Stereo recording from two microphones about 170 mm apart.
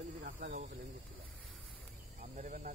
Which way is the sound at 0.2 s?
55° right (ahead or behind).